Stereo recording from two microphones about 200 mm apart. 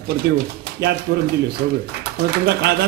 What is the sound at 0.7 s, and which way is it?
A man's voice, 55° right (ahead or behind).